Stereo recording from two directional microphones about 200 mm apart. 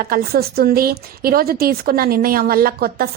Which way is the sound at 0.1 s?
50° right (ahead or behind).